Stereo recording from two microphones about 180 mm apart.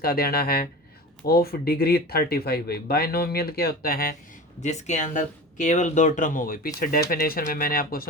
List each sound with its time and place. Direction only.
0.0 s speech: 55° left (ahead or behind)
4.6 s speech: 40° left (ahead or behind)